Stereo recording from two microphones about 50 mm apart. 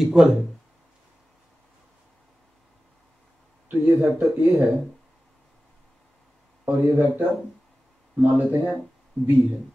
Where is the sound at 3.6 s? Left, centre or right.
Right.